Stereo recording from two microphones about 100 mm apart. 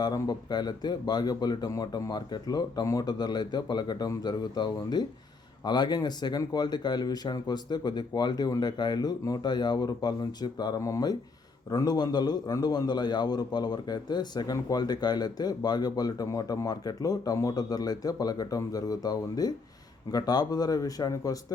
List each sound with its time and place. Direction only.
0.0 s speech: 45° left (ahead or behind)
10.8 s a man's voice: 35° left (ahead or behind)